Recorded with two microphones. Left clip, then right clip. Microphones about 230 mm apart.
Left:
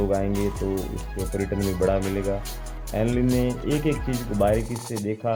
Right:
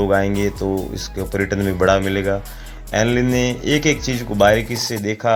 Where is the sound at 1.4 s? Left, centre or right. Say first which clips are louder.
Right 7 dB; centre.